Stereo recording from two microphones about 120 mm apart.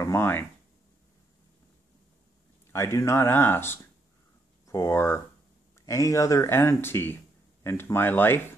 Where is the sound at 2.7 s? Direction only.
25° left (ahead or behind).